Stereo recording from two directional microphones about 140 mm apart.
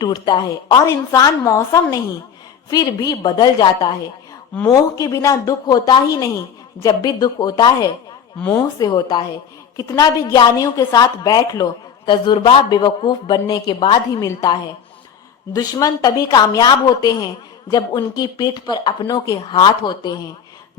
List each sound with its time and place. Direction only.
0.0 s a woman's voice: 30° left (ahead or behind)
8.4 s a woman's voice: 10° left (ahead or behind)
8.8 s a woman's voice: 30° left (ahead or behind)